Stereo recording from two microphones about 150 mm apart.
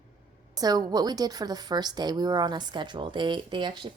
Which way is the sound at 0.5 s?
25° right (ahead or behind).